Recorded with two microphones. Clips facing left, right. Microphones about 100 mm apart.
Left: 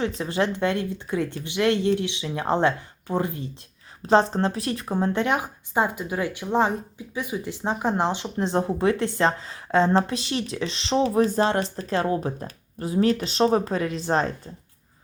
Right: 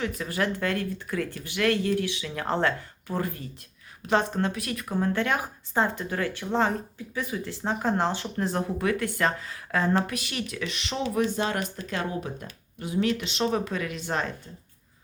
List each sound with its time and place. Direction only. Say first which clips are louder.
0.0 s speech: left 4 dB; 25° left (ahead or behind)
4.0 s speech: left 5 dB; 30° left (ahead or behind)